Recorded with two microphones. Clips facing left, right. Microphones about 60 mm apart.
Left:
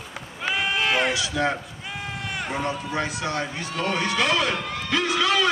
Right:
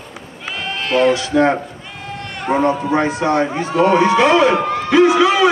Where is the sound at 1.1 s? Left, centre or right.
Right.